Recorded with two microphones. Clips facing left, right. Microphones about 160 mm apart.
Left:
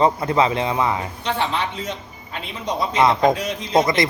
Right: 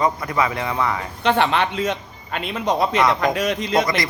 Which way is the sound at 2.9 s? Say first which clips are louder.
Left 2 dB; 25° left (ahead or behind).